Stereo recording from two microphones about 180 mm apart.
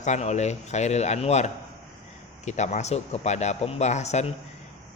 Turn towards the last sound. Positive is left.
turn(degrees=40)  # may be behind; listen again after turning